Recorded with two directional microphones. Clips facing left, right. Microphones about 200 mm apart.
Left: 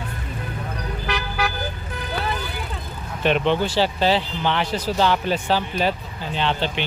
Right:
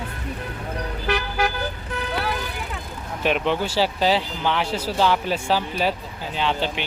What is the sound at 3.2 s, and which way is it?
Speech, 5° right (ahead or behind).